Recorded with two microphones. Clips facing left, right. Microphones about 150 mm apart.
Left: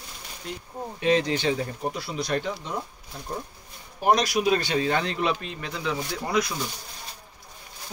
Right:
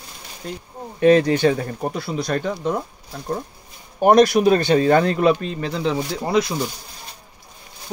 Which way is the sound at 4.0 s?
55° right (ahead or behind).